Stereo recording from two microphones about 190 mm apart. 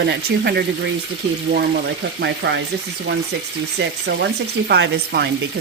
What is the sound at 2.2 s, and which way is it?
Speech, 65° right (ahead or behind).